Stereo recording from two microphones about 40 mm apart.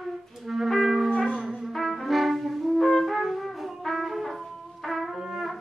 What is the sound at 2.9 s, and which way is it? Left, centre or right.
Brass instrument, centre.